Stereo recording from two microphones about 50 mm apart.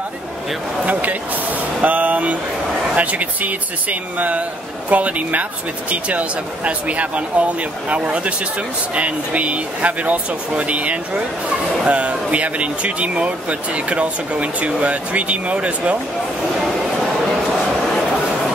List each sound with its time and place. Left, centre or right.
1.8 s speech: right